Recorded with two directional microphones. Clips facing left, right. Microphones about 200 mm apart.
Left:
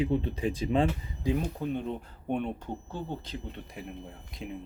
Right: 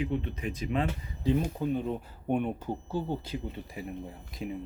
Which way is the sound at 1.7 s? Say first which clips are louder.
Right 2 dB; 5° right (ahead or behind).